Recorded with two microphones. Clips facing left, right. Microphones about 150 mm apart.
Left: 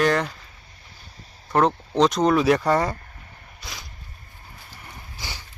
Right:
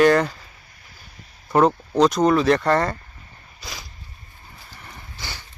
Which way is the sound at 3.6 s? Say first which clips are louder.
Right 2 dB; centre (ahead or behind).